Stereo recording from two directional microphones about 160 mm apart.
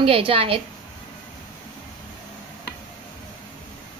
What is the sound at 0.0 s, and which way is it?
Speech, 35° right (ahead or behind).